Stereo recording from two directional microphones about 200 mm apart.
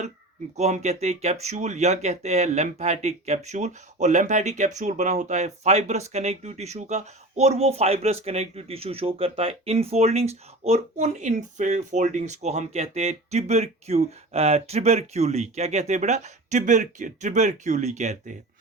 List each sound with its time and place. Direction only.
0.5 s speech: 35° right (ahead or behind)